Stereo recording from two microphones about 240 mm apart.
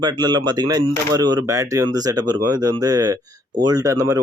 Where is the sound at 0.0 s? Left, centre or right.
Centre.